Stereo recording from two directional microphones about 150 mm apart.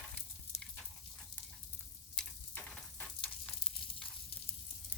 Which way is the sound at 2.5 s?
5° left (ahead or behind).